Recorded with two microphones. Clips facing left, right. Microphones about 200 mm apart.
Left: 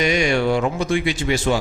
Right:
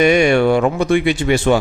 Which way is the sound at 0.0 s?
60° right (ahead or behind).